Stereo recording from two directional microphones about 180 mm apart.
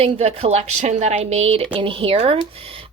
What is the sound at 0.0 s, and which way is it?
Speech, 30° right (ahead or behind).